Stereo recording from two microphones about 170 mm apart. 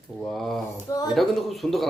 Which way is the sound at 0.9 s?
20° left (ahead or behind).